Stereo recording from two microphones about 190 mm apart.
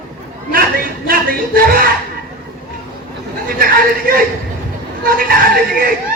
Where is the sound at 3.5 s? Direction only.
50° right (ahead or behind).